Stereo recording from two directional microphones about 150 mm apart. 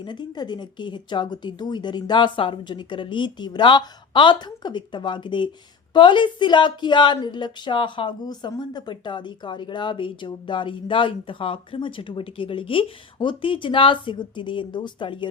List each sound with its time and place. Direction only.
0.0 s speech: 30° left (ahead or behind)